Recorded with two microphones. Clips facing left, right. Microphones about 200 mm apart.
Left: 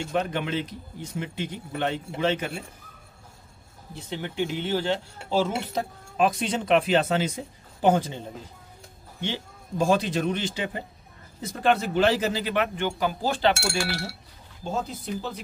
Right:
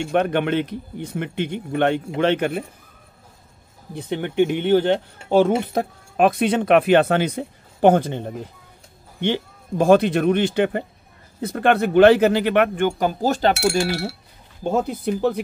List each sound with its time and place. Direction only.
0.0 s speech: 65° right (ahead or behind)
3.9 s speech: 55° right (ahead or behind)
13.6 s speech: 20° right (ahead or behind)
14.6 s speech: 60° right (ahead or behind)